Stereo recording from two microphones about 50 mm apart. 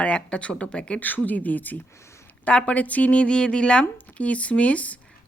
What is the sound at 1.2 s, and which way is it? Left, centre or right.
Speech, left.